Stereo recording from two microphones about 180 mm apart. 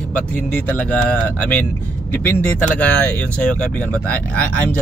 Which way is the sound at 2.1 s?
10° left (ahead or behind).